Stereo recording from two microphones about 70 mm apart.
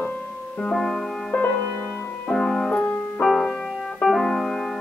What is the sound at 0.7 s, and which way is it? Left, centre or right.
Music, centre.